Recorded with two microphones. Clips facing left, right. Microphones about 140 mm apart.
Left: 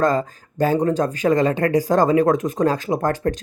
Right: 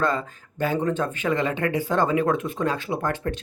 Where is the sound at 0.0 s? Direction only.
40° left (ahead or behind).